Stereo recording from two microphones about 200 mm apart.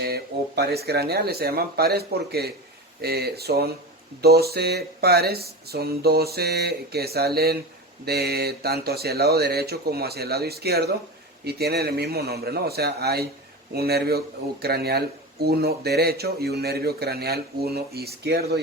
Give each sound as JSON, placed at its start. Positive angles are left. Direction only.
{"t": 0.0, "sound": "speech", "side_deg": -50}